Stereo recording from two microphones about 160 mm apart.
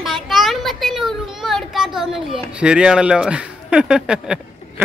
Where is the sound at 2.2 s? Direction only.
35° right (ahead or behind).